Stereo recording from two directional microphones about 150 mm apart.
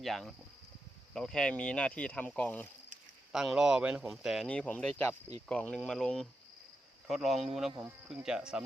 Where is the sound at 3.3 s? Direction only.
5° right (ahead or behind).